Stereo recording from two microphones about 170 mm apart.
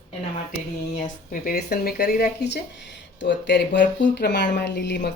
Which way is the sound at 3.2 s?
90° left.